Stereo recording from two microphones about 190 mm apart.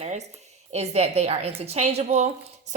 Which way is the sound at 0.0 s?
35° right (ahead or behind).